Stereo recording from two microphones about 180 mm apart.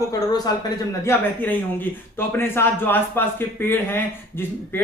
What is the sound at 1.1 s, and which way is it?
Speech, 10° left (ahead or behind).